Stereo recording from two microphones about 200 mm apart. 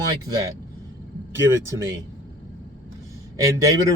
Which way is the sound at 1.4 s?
15° right (ahead or behind).